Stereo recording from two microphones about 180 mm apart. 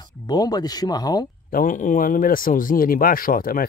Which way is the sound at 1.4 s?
50° left (ahead or behind).